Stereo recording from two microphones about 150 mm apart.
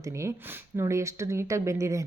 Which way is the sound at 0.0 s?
20° right (ahead or behind).